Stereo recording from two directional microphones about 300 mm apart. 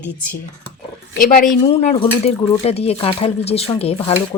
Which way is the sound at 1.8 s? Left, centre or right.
Centre.